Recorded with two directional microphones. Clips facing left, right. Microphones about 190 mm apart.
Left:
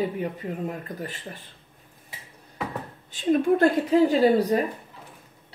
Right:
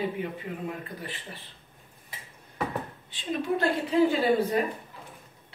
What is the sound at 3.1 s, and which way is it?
A woman's voice, 45° left (ahead or behind).